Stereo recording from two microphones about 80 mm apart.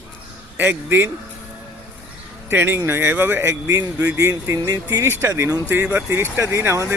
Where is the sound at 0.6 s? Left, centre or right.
Right.